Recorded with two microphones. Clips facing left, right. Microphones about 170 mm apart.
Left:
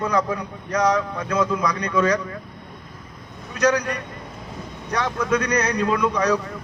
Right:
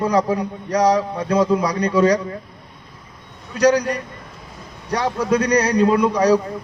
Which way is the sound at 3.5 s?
35° right (ahead or behind).